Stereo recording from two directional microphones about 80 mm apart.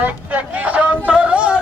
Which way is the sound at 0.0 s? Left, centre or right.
Centre.